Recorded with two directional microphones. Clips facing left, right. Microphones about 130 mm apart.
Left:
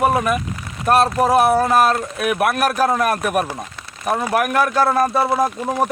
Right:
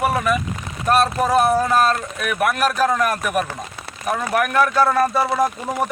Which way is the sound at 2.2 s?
45° left (ahead or behind).